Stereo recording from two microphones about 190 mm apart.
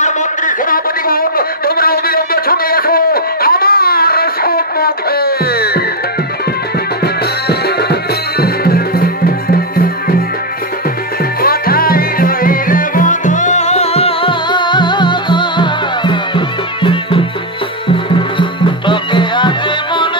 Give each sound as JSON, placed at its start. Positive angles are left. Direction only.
{"t": 0.0, "sound": "a sound", "side_deg": 40}
{"t": 7.4, "sound": "music", "side_deg": 60}
{"t": 11.4, "sound": "music", "side_deg": 50}